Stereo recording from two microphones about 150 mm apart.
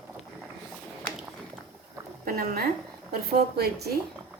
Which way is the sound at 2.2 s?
90° right.